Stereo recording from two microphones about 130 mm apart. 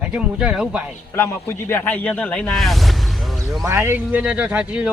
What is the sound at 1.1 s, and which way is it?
Speech, 20° left (ahead or behind).